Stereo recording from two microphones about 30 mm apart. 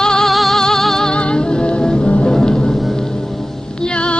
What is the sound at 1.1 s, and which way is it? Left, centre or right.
Music, left.